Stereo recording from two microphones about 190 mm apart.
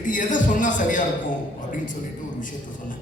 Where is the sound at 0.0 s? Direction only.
40° left (ahead or behind).